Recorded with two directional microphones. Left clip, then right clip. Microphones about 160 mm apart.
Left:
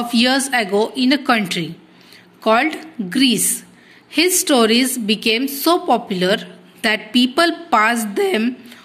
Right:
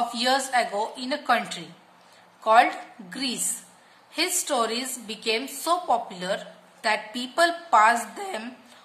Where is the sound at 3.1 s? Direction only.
30° left (ahead or behind).